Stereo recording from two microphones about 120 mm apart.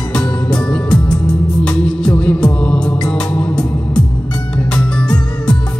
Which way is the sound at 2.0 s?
10° left (ahead or behind).